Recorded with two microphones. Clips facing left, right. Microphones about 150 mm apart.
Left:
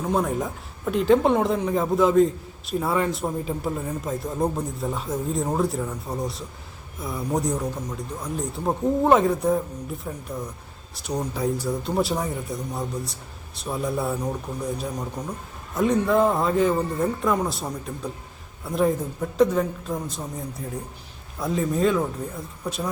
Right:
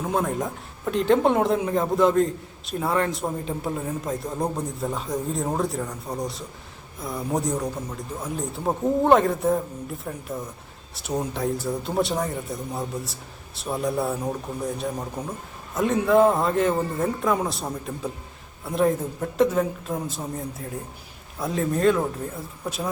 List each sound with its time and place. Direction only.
0.1 s a man's voice: centre (ahead or behind)